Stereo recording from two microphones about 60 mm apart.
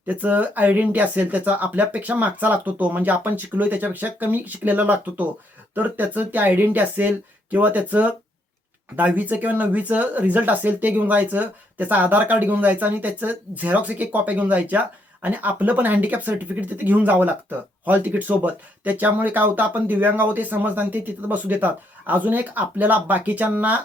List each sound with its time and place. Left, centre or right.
0.1 s speech: right